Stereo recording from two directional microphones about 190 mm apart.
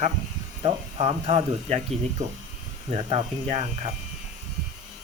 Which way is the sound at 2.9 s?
30° right (ahead or behind).